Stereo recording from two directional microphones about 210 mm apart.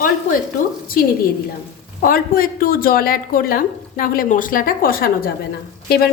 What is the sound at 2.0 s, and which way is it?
A woman's voice, 45° left (ahead or behind).